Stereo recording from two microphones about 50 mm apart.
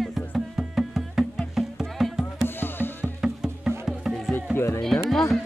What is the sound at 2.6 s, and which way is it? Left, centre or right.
Music, left.